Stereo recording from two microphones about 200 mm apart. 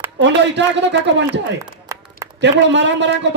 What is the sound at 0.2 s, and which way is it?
A man's voice, 60° right (ahead or behind).